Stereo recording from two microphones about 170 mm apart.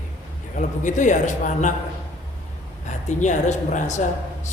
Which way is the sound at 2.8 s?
45° left (ahead or behind).